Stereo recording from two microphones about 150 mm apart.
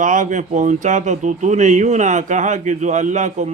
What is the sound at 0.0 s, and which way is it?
Speech, 55° right (ahead or behind).